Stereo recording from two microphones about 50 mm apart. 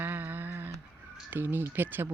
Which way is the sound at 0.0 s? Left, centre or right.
Right.